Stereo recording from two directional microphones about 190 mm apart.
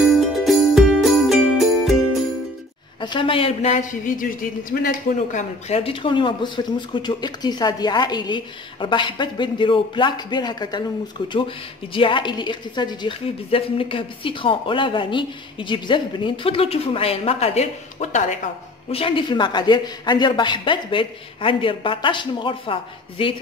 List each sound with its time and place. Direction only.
0.4 s music: centre (ahead or behind)
3.0 s a woman's voice: 25° left (ahead or behind); by 5.4 s 45° left (ahead or behind)
5.7 s a woman's voice: 30° left (ahead or behind)
18.9 s a woman's voice: 30° left (ahead or behind)